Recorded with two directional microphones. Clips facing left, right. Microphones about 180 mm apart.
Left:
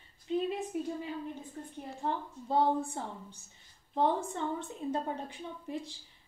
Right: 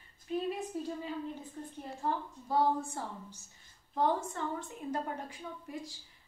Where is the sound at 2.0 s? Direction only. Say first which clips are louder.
Even; 25° left (ahead or behind).